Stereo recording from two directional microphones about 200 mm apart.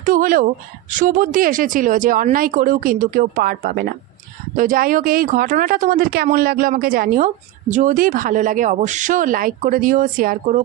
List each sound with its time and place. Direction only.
0.0 s speech: 45° right (ahead or behind)